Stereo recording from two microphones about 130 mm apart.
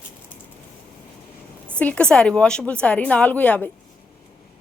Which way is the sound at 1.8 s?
10° left (ahead or behind).